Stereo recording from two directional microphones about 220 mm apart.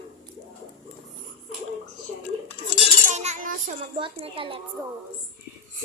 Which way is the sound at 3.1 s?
30° right (ahead or behind).